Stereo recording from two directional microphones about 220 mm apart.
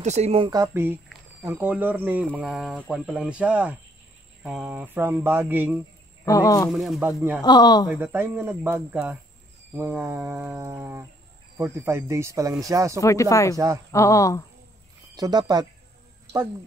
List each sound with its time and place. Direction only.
0.0 s speech: 30° right (ahead or behind); by 5.8 s 10° right (ahead or behind)
6.2 s speech: 15° left (ahead or behind)
6.7 s speech: centre (ahead or behind)
7.4 s speech: 20° left (ahead or behind)
7.9 s speech: 10° right (ahead or behind)
13.0 s speech: 15° left (ahead or behind)
15.1 s speech: 20° right (ahead or behind)